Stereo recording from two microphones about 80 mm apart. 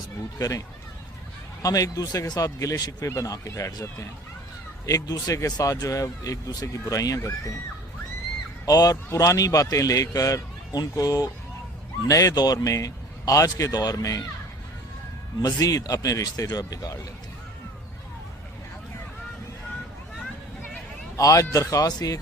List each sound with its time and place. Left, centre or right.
0.3 s speech: left
1.6 s speech: left
4.9 s speech: left
8.6 s speech: left
15.4 s speech: left
21.2 s speech: left